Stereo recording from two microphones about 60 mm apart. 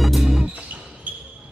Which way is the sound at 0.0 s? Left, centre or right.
Centre.